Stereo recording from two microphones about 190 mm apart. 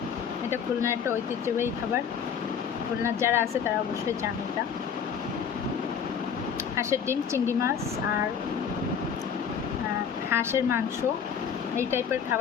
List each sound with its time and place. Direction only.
0.5 s speech: 15° right (ahead or behind)
3.0 s speech: 15° right (ahead or behind)
6.7 s speech: 15° right (ahead or behind)
10.2 s speech: 10° right (ahead or behind)
11.8 s speech: 15° right (ahead or behind)